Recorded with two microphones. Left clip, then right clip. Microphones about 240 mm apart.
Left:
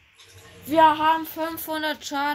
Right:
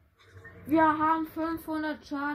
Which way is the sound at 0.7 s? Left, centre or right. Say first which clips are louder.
Left 7 dB; left.